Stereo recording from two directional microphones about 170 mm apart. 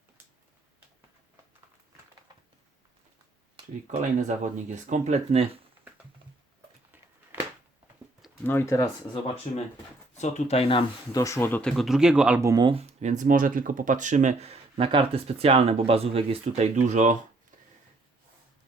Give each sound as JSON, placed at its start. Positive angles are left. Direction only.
{"t": 4.2, "sound": "speech", "side_deg": -45}
{"t": 8.4, "sound": "speech", "side_deg": 15}
{"t": 9.5, "sound": "speech", "side_deg": 45}
{"t": 11.2, "sound": "speech", "side_deg": 15}
{"t": 12.4, "sound": "speech", "side_deg": -20}
{"t": 12.7, "sound": "speech", "side_deg": -40}